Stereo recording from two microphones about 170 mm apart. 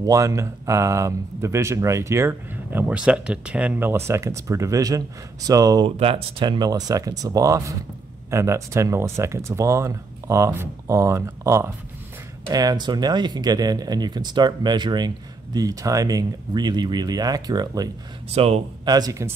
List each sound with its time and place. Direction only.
0.0 s speech: 20° right (ahead or behind)
5.9 s speech: 35° right (ahead or behind)
18.3 s speech: 35° right (ahead or behind)
18.9 s speech: 20° right (ahead or behind)